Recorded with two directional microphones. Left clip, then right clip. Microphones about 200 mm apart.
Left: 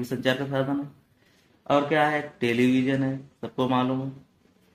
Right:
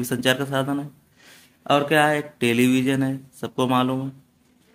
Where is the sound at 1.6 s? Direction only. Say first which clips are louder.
Right 4 dB; 35° right (ahead or behind).